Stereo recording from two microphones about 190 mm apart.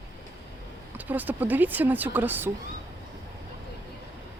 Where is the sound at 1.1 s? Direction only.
10° right (ahead or behind).